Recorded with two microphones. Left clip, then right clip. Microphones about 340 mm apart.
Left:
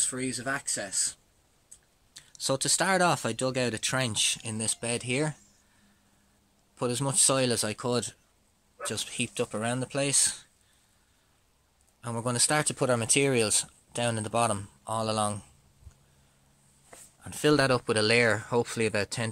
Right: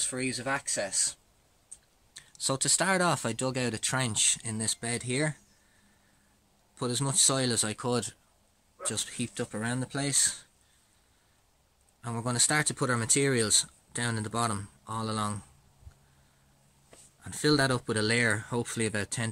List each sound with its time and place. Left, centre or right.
0.2 s speech: left
2.1 s speech: centre
6.8 s speech: centre
12.0 s speech: centre
17.2 s speech: centre